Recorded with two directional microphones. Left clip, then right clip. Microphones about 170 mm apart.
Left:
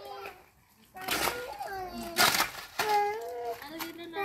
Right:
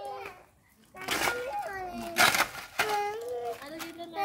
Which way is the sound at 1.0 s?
25° left (ahead or behind).